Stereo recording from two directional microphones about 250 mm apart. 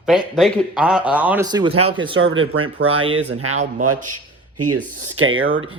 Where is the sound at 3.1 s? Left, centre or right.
Right.